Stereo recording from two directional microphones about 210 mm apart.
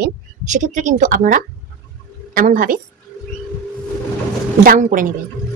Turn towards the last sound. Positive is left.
turn(degrees=-40)  # may be behind; listen again after turning